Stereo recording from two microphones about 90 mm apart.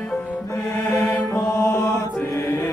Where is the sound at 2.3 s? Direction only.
35° left (ahead or behind).